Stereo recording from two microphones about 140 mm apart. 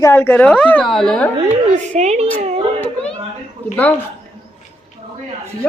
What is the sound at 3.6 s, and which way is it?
Speech, 15° left (ahead or behind).